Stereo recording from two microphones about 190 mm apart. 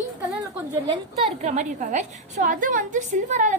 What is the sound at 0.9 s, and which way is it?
A woman's voice, 35° right (ahead or behind).